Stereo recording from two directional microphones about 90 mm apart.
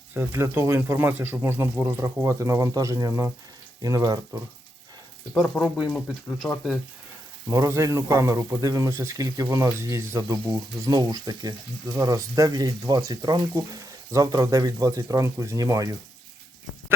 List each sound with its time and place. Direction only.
0.1 s speech: 25° right (ahead or behind); by 4.2 s 40° right (ahead or behind)
5.3 s speech: centre (ahead or behind)
6.4 s speech: 5° left (ahead or behind)
7.4 s speech: 30° right (ahead or behind)